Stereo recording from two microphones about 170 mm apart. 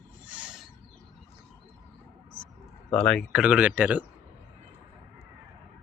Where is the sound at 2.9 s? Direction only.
5° left (ahead or behind).